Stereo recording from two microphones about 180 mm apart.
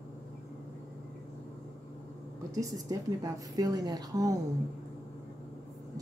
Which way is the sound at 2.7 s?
20° right (ahead or behind).